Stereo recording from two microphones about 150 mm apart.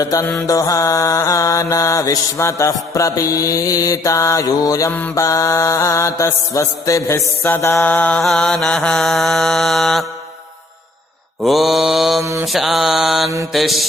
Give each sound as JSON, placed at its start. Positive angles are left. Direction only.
{"t": 0.0, "sound": "mantra", "side_deg": 20}
{"t": 0.3, "sound": "mantra", "side_deg": 10}
{"t": 4.9, "sound": "mantra", "side_deg": 10}
{"t": 5.2, "sound": "mantra", "side_deg": 20}
{"t": 11.4, "sound": "mantra", "side_deg": 0}
{"t": 12.2, "sound": "mantra", "side_deg": -20}
{"t": 12.5, "sound": "mantra", "side_deg": 0}